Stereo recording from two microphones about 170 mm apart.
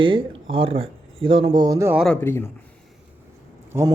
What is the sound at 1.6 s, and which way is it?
Speech, 20° right (ahead or behind).